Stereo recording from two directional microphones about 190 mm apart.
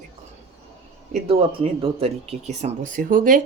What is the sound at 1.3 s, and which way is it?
Speech, 30° right (ahead or behind).